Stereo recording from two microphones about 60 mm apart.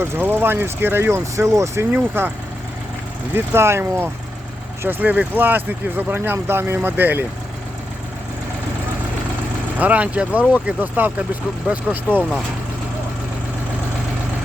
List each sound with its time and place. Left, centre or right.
0.2 s speech: right
2.2 s speech: right
3.3 s speech: right
4.8 s speech: right
6.3 s speech: right
9.7 s speech: right